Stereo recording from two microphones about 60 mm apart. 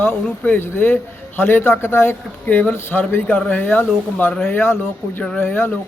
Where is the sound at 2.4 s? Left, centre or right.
Left.